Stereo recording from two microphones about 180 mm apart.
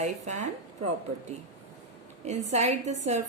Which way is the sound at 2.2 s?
40° right (ahead or behind).